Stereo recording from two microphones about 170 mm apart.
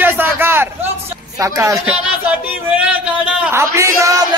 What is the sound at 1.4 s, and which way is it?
Speech, 20° right (ahead or behind).